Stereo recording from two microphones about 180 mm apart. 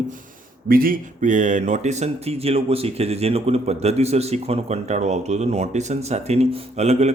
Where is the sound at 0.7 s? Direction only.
55° right (ahead or behind).